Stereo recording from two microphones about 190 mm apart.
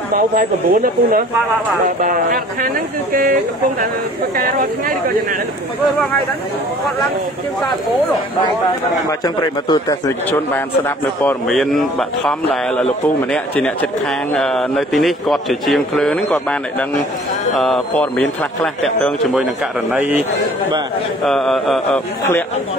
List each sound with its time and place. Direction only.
0.1 s speech: 45° right (ahead or behind)
4.4 s speech: 50° right (ahead or behind)
9.2 s a man's voice: 20° left (ahead or behind)
11.2 s a man's voice: centre (ahead or behind)
17.6 s a man's voice: centre (ahead or behind)
21.3 s a man's voice: centre (ahead or behind)